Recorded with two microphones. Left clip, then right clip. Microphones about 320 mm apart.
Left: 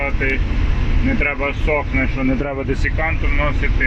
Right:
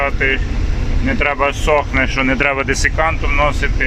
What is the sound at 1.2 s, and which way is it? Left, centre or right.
Speech, right.